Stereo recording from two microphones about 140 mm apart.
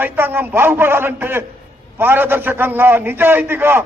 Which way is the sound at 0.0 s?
15° right (ahead or behind).